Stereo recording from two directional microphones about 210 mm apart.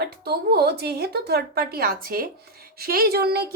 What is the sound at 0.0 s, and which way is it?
Child singing, 50° right (ahead or behind).